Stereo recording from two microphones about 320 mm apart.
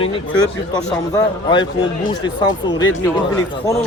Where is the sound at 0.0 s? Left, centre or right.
Centre.